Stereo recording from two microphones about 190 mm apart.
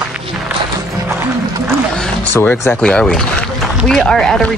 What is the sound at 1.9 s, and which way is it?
Speech, 5° left (ahead or behind).